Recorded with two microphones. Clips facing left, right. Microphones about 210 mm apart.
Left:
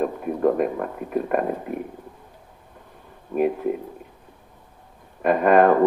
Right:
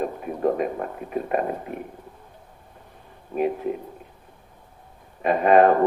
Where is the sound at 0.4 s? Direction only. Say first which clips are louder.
Left 2 dB; 50° left (ahead or behind).